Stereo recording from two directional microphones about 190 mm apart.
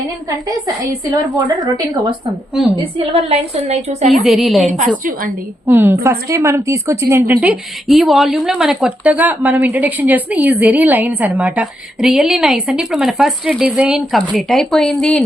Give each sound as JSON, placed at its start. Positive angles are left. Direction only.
{"t": 1.1, "sound": "a woman's voice", "side_deg": -20}
{"t": 3.0, "sound": "a woman's voice", "side_deg": -30}
{"t": 4.1, "sound": "a woman's voice", "side_deg": 0}
{"t": 5.6, "sound": "a woman's voice", "side_deg": -10}